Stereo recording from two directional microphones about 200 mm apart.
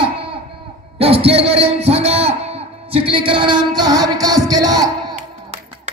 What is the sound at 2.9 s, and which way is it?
Music, 25° right (ahead or behind).